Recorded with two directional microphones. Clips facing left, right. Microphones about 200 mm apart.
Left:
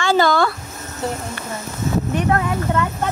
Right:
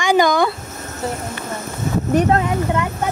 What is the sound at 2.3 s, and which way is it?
Speech, 20° right (ahead or behind).